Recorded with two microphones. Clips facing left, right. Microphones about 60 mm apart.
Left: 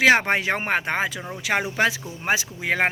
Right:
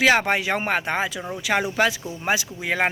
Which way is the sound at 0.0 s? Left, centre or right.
Left.